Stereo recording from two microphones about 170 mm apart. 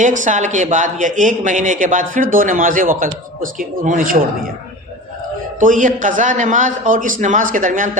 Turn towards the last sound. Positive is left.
turn(degrees=-50)  # may be behind; listen again after turning